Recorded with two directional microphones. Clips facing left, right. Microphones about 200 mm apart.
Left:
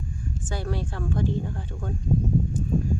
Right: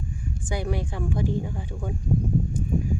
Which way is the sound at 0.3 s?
15° right (ahead or behind).